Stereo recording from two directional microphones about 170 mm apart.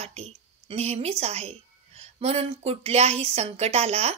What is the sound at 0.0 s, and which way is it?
A woman's voice, 40° right (ahead or behind).